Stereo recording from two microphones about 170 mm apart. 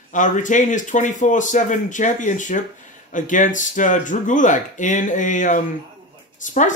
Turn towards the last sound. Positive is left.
turn(degrees=50)  # may be behind; listen again after turning